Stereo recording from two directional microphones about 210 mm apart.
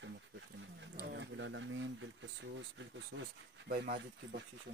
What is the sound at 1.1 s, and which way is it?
Speech, 60° right (ahead or behind).